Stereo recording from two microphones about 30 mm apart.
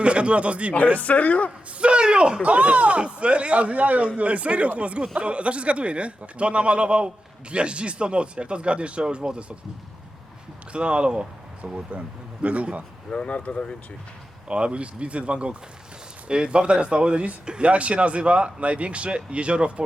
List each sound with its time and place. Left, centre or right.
0.0 s speech: right
0.9 s speech: left
1.8 s speech: right
2.4 s speech: right
10.7 s speech: right
11.9 s speech: right
13.1 s speech: left
14.4 s speech: right
17.4 s speech: right
17.7 s speech: right